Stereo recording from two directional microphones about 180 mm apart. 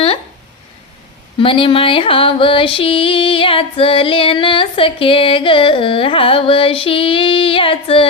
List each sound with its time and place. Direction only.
1.4 s music: 30° left (ahead or behind)